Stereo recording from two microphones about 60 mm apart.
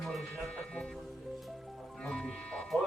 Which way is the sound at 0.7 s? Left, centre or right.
Centre.